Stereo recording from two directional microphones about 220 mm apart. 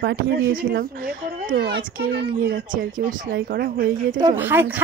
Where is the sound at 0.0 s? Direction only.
40° right (ahead or behind).